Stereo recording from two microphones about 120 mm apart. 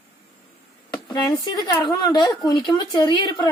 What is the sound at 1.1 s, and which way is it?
A woman's voice, 35° left (ahead or behind).